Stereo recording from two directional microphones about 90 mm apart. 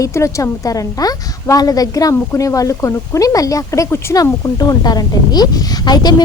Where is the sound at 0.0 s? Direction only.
35° left (ahead or behind).